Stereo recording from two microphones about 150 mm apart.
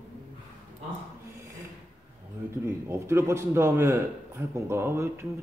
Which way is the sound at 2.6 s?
15° right (ahead or behind).